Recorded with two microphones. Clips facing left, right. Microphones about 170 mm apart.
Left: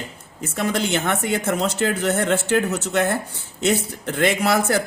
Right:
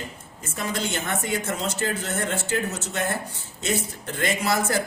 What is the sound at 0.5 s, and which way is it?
Speech, 65° left (ahead or behind).